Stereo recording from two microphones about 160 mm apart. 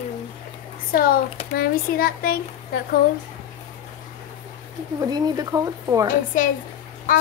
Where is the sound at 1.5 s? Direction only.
70° left (ahead or behind).